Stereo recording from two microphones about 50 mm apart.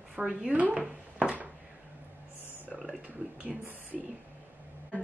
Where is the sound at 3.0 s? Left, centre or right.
Right.